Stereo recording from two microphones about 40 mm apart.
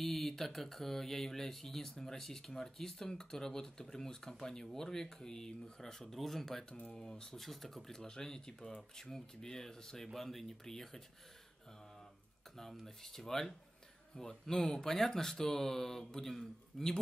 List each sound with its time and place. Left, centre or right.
0.0 s speech: centre
6.7 s speech: left
7.3 s speech: centre
12.5 s speech: centre